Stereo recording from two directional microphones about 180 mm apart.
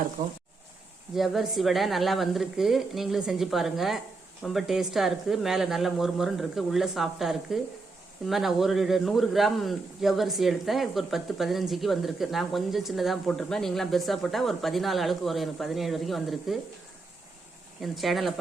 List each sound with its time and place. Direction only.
1.1 s a man's voice: centre (ahead or behind)
17.7 s a man's voice: centre (ahead or behind)